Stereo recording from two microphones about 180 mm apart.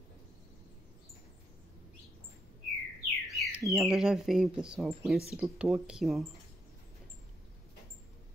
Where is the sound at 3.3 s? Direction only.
Centre (ahead or behind).